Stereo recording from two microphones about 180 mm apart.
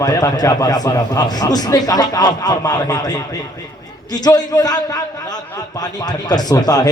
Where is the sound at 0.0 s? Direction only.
20° left (ahead or behind).